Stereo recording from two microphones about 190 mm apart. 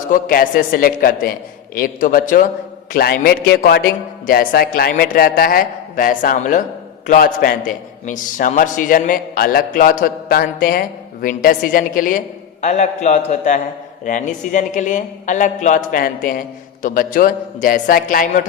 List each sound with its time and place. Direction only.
0.1 s a man's voice: 50° left (ahead or behind)